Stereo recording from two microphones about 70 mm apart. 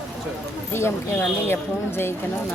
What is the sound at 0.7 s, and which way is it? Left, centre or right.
Speech, left.